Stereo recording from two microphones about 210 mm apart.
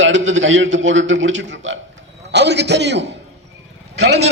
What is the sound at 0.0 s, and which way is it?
A man's voice, 60° right (ahead or behind).